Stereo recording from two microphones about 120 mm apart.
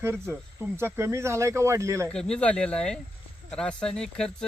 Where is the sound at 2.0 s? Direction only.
5° left (ahead or behind).